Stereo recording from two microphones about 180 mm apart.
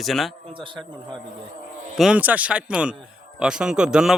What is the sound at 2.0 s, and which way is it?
A man's voice, 5° right (ahead or behind).